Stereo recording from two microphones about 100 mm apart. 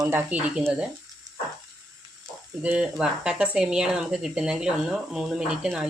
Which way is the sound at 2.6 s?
10° right (ahead or behind).